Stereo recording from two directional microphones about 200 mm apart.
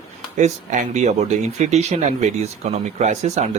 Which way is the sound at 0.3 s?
40° right (ahead or behind).